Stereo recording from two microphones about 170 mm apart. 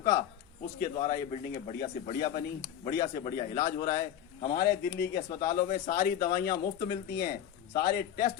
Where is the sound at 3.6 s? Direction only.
20° left (ahead or behind).